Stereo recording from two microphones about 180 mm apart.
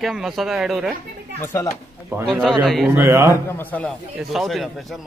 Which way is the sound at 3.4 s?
10° left (ahead or behind).